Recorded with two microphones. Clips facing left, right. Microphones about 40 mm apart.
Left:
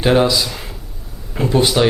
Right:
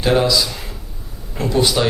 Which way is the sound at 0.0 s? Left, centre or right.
Centre.